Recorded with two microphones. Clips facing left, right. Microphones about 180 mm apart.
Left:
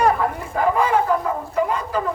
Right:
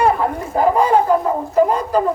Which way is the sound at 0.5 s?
35° right (ahead or behind).